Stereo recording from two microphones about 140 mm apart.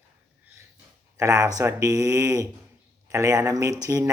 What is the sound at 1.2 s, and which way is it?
Speech, 20° right (ahead or behind).